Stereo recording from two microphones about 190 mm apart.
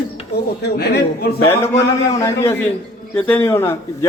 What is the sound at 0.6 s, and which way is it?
Speech, 60° left (ahead or behind).